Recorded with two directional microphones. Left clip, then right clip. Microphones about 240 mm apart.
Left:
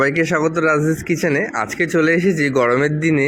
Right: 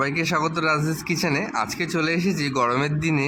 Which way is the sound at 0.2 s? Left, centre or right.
Centre.